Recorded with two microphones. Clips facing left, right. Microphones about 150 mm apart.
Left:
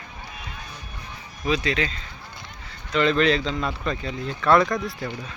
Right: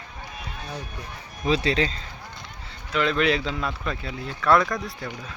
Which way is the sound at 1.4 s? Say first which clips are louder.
Right 1 dB; 30° right (ahead or behind).